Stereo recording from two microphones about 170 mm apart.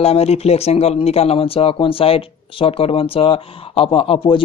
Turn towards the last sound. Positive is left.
turn(degrees=30)  # may be behind; listen again after turning